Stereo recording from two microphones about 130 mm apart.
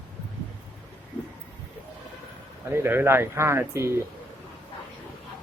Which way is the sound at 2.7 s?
20° right (ahead or behind).